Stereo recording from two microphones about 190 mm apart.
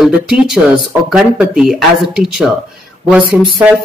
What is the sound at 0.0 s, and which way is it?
Speech, centre (ahead or behind).